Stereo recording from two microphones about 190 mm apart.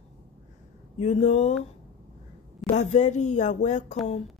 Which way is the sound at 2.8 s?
40° left (ahead or behind).